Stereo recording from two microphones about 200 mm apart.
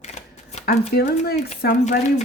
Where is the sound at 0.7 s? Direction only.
50° left (ahead or behind).